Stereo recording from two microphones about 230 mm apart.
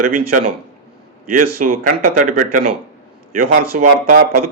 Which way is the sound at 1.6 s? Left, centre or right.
Right.